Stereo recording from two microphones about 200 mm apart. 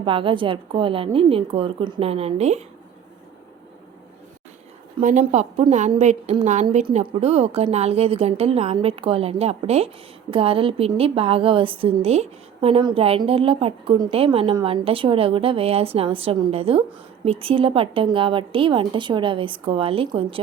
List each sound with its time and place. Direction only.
0.0 s a woman's voice: 25° right (ahead or behind)
4.9 s a woman's voice: 40° right (ahead or behind)